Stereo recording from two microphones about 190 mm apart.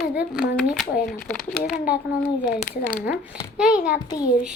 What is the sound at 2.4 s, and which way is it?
A child's voice, 5° left (ahead or behind).